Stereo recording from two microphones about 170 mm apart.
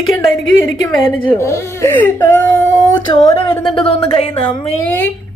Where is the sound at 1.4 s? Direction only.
15° left (ahead or behind).